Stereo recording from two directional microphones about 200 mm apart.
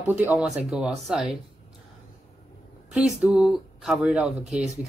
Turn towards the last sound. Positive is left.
turn(degrees=-35)  # may be behind; listen again after turning